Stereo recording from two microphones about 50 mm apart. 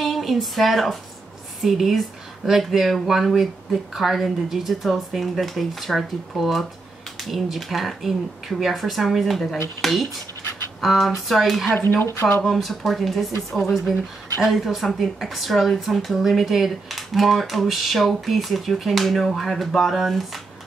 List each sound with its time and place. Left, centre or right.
0.0 s speech: centre
11.8 s speech: left
12.4 s speech: centre